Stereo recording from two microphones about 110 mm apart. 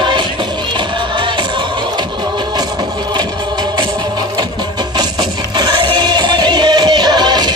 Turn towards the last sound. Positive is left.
turn(degrees=-40)  # may be behind; listen again after turning